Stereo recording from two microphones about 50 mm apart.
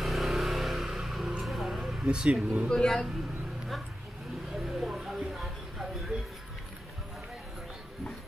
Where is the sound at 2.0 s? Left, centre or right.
Centre.